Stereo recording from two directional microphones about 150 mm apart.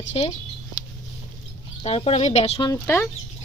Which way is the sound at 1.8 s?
40° left (ahead or behind).